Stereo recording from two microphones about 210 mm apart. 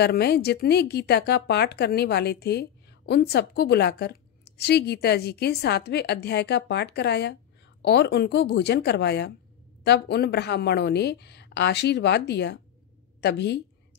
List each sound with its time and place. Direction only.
0.0 s a woman's voice: 50° left (ahead or behind)